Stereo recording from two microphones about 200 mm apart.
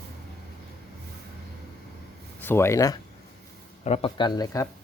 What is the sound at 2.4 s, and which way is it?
Speech, 10° left (ahead or behind).